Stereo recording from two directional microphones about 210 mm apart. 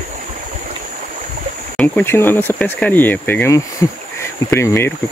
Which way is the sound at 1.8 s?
10° left (ahead or behind).